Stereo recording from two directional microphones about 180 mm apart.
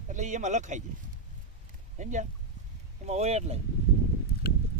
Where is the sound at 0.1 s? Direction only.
45° right (ahead or behind).